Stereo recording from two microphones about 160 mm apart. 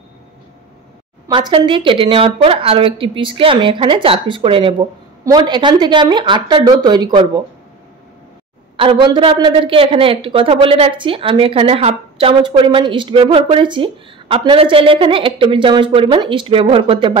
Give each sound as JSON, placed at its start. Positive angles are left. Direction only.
{"t": 1.3, "sound": "a woman's voice", "side_deg": -30}
{"t": 8.7, "sound": "a woman's voice", "side_deg": -30}